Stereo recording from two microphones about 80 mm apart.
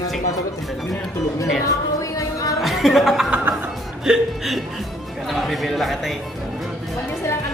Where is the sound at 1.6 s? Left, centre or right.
Left.